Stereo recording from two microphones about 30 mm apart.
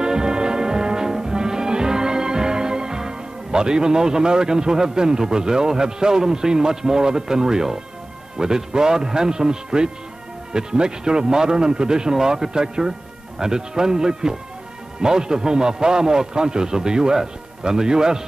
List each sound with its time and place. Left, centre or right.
0.0 s brass instrument: right
5.3 s a man's voice: right